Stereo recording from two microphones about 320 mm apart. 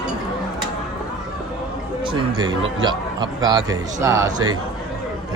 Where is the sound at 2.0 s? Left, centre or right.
Centre.